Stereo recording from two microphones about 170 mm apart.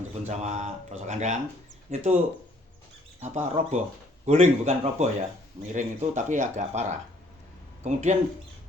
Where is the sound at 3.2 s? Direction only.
45° right (ahead or behind).